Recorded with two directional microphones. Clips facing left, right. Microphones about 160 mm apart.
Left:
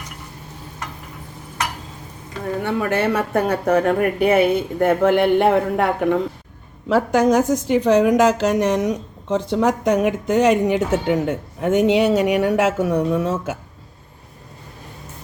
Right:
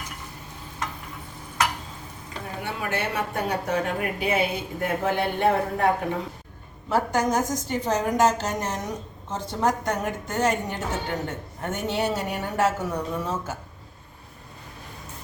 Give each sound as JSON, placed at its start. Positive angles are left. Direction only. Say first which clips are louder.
{"t": 2.6, "sound": "speech", "louder": "left 9 dB", "side_deg": 55}
{"t": 4.8, "sound": "speech", "louder": "left 9 dB", "side_deg": 85}
{"t": 6.8, "sound": "speech", "louder": "left 7 dB", "side_deg": 90}